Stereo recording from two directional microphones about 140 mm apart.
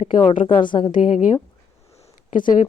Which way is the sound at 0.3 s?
35° left (ahead or behind).